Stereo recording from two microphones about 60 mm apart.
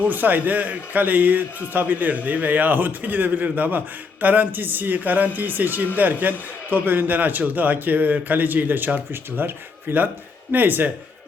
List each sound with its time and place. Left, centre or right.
0.1 s a man's voice: right